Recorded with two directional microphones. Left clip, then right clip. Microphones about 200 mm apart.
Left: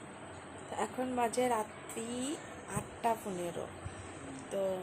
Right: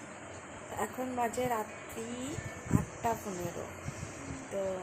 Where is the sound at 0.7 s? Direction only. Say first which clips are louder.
Even; 10° left (ahead or behind).